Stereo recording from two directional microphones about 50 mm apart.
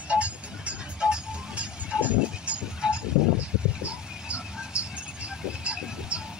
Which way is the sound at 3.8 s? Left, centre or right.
Right.